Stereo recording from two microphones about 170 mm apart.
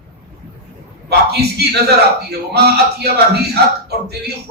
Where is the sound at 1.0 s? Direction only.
70° right (ahead or behind).